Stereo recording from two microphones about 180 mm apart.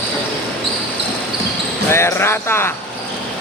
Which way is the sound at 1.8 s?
15° left (ahead or behind).